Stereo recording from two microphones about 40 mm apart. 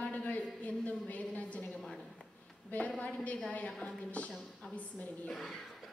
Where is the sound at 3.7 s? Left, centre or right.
Centre.